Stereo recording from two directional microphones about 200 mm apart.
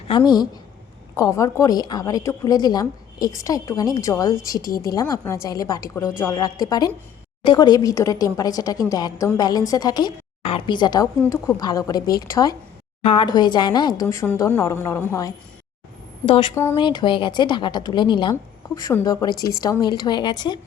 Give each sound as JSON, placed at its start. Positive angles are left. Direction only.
{"t": 0.1, "sound": "a woman's voice", "side_deg": 20}
{"t": 4.6, "sound": "speech", "side_deg": 45}
{"t": 4.9, "sound": "a woman's voice", "side_deg": 15}
{"t": 16.2, "sound": "a woman's voice", "side_deg": 25}